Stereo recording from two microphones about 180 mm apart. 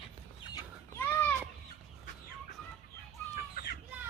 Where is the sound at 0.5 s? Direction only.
15° left (ahead or behind).